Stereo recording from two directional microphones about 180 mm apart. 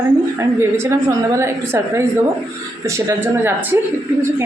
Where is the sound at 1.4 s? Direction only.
15° right (ahead or behind).